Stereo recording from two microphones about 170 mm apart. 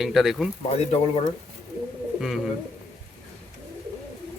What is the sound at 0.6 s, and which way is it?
Speech, 35° left (ahead or behind).